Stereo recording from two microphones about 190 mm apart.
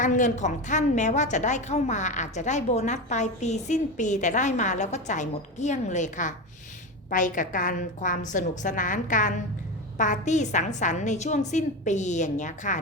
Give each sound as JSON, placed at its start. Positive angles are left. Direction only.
{"t": 0.0, "sound": "a woman's voice", "side_deg": 40}